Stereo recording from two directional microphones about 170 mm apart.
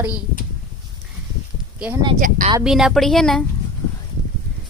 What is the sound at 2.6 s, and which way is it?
Speech, centre (ahead or behind).